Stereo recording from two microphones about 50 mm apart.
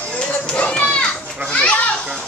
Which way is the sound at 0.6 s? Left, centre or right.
Left.